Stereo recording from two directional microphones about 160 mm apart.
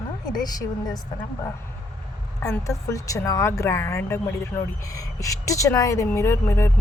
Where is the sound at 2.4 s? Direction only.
20° left (ahead or behind).